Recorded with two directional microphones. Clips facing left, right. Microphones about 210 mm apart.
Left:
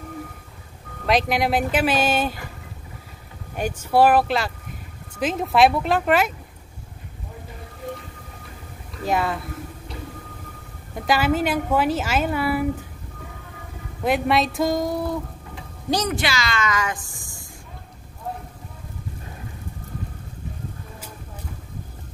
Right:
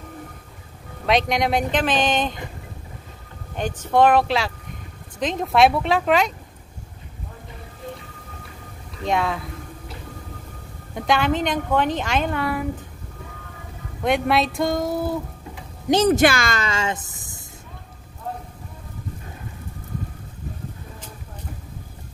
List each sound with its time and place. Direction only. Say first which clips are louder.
1.0 s a woman's voice: even; centre (ahead or behind)
3.5 s a woman's voice: even; 10° left (ahead or behind)
9.0 s a woman's voice: even; 5° left (ahead or behind)
11.0 s a woman's voice: even; 5° left (ahead or behind)
14.0 s a woman's voice: even; centre (ahead or behind)
15.9 s a woman's voice: right 7 dB; 30° right (ahead or behind)
16.2 s speech: right 6 dB; 50° right (ahead or behind)
16.6 s speech: even; 25° right (ahead or behind)